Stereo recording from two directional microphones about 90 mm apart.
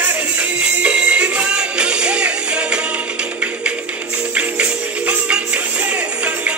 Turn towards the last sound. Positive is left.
turn(degrees=-15)  # may be behind; listen again after turning